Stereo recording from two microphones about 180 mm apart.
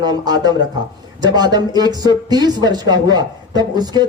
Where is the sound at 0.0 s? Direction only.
25° right (ahead or behind).